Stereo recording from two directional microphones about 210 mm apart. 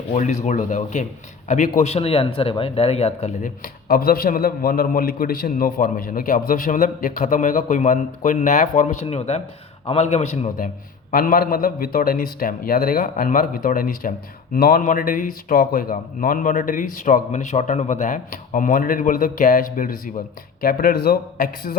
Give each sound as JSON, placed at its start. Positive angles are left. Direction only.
{"t": 0.1, "sound": "a man's voice", "side_deg": 35}
{"t": 3.6, "sound": "a man's voice", "side_deg": 45}